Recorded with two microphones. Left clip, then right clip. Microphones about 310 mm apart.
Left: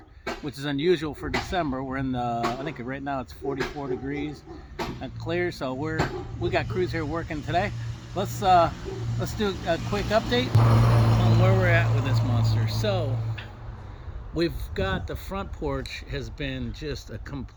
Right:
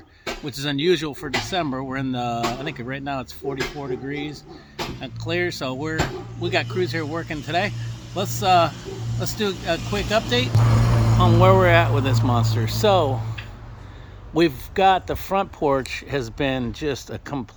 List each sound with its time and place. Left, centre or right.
0.3 s speech: centre
10.7 s vehicle: left
11.3 s speech: centre
14.3 s speech: centre